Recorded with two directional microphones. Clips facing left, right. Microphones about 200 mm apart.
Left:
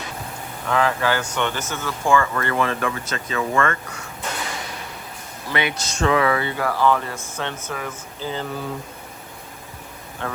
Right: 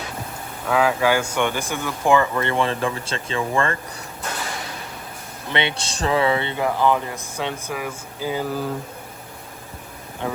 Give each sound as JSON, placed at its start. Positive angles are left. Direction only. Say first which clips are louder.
{"t": 0.7, "sound": "speech", "louder": "right 2 dB", "side_deg": -10}
{"t": 5.5, "sound": "speech", "louder": "even", "side_deg": -25}
{"t": 10.2, "sound": "speech", "louder": "right 3 dB", "side_deg": -15}